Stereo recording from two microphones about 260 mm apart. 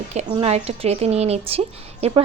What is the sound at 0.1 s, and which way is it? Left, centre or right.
A woman's voice, right.